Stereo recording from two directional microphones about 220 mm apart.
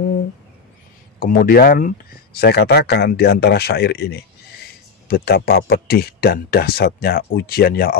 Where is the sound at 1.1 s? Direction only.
40° left (ahead or behind).